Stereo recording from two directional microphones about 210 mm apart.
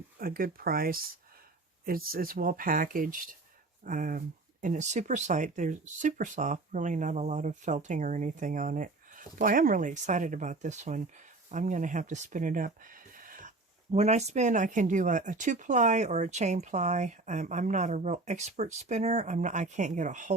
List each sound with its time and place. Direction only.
0.2 s speech: 45° right (ahead or behind)